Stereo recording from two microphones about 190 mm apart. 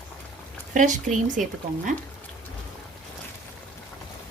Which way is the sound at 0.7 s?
40° right (ahead or behind).